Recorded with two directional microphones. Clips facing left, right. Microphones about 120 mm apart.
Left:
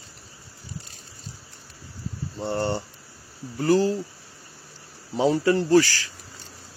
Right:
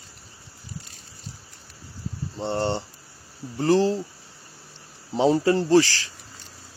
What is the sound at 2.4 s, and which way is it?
Speech, 25° right (ahead or behind).